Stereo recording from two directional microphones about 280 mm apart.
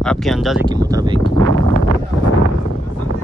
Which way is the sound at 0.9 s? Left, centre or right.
Centre.